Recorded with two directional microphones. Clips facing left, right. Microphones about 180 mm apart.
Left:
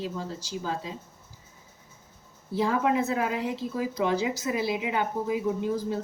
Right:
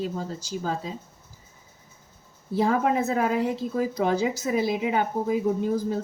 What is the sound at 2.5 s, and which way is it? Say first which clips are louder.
A woman's voice: right 2 dB; 45° right (ahead or behind).